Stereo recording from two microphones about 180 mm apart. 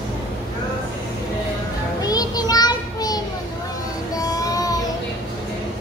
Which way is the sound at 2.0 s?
20° left (ahead or behind).